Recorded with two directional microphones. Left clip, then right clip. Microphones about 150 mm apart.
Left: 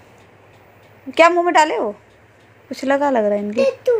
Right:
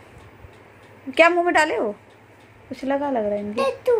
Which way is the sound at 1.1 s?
25° left (ahead or behind).